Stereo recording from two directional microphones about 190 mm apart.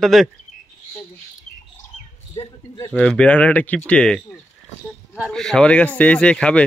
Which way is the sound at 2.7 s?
15° left (ahead or behind).